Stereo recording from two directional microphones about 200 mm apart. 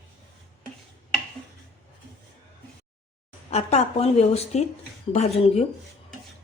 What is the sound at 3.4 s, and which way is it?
A woman's voice, 35° left (ahead or behind).